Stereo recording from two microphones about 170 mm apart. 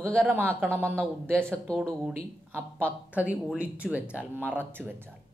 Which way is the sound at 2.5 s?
10° right (ahead or behind).